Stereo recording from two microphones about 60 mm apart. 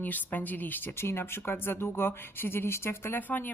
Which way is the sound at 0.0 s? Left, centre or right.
Left.